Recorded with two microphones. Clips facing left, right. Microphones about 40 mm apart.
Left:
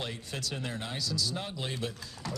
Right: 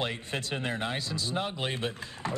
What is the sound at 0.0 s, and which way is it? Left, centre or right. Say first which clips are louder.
Speech: right 5 dB; right.